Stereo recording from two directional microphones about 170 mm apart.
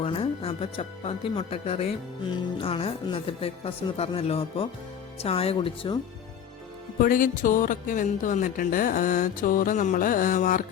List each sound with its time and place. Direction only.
0.0 s speech: 35° left (ahead or behind)
7.0 s a woman's voice: 55° left (ahead or behind)